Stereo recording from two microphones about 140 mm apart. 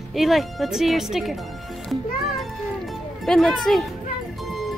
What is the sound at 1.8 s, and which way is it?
Music, centre (ahead or behind).